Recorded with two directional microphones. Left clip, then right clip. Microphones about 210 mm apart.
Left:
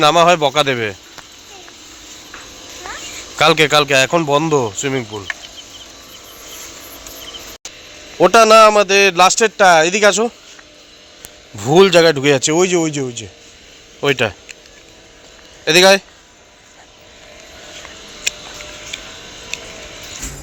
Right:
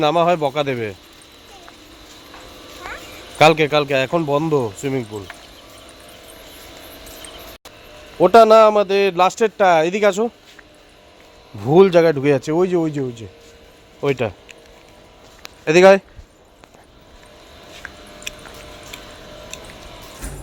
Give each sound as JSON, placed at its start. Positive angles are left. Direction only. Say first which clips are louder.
{"t": 0.0, "sound": "speech", "louder": "left 5 dB", "side_deg": 5}
{"t": 3.3, "sound": "speech", "louder": "left 2 dB", "side_deg": 0}
{"t": 8.2, "sound": "a man's voice", "louder": "left 2 dB", "side_deg": -5}
{"t": 11.6, "sound": "a man's voice", "louder": "left 3 dB", "side_deg": -10}
{"t": 15.6, "sound": "speech", "louder": "left 1 dB", "side_deg": -20}